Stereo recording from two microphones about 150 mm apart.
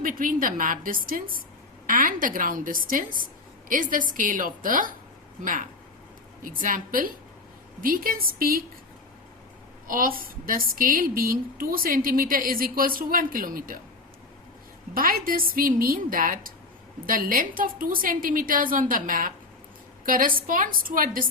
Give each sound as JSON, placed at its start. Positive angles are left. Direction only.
{"t": 0.0, "sound": "a woman's voice", "side_deg": -65}
{"t": 9.8, "sound": "a woman's voice", "side_deg": -70}
{"t": 14.9, "sound": "a woman's voice", "side_deg": -70}